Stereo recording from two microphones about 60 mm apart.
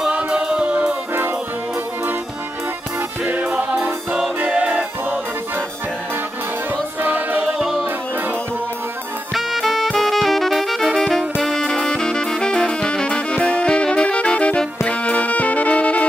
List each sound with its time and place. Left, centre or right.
0.1 s music: right
3.3 s music: right
7.0 s music: right
7.5 s music: centre
9.3 s music: centre
11.4 s saxophone: centre
11.9 s music: centre